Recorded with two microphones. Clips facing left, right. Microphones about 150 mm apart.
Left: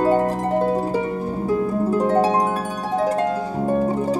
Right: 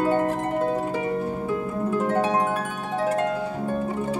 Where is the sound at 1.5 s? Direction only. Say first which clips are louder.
Left 8 dB; 35° left (ahead or behind).